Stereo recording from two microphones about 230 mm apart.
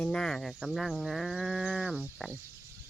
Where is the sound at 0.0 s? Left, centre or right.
Centre.